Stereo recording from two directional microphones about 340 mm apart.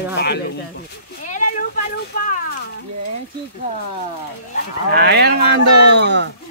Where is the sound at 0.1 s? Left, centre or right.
Left.